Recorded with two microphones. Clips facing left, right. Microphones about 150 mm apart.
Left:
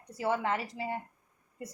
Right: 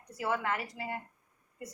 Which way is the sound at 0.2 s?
30° left (ahead or behind).